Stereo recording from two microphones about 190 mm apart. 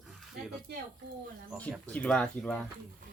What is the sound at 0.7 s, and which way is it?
Speech, 60° right (ahead or behind).